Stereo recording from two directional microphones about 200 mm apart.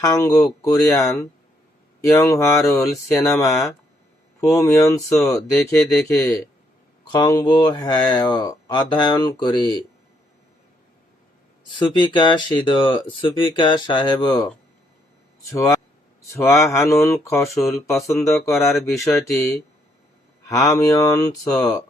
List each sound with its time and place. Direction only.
0.0 s speech: 15° left (ahead or behind)
2.0 s speech: 15° left (ahead or behind)
11.8 s speech: 25° left (ahead or behind)
15.5 s speech: 15° left (ahead or behind)